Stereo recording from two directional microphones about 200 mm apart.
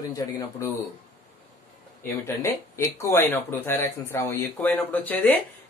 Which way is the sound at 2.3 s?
15° left (ahead or behind).